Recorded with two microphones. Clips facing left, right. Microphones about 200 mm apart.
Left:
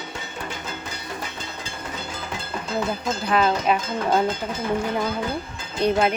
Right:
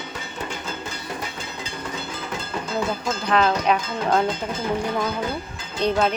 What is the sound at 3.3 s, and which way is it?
Speech, 5° left (ahead or behind).